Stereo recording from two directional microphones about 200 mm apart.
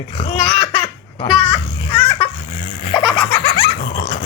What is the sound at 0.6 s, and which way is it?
Baby laughter, 25° left (ahead or behind).